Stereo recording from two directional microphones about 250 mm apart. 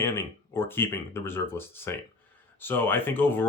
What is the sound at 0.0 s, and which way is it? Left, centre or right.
Speech, centre.